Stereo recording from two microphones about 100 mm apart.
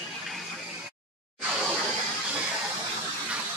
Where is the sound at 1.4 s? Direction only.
5° right (ahead or behind).